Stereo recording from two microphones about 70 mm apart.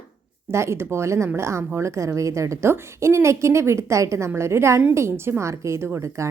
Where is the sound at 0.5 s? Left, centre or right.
Right.